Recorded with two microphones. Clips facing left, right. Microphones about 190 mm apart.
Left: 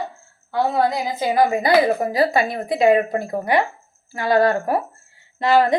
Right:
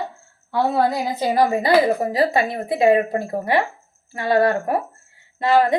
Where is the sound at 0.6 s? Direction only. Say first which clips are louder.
Even; 55° right (ahead or behind).